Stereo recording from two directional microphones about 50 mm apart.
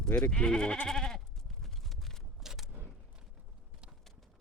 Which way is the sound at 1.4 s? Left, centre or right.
Centre.